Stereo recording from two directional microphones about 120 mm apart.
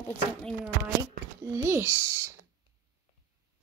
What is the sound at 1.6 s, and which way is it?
Speech, 20° right (ahead or behind).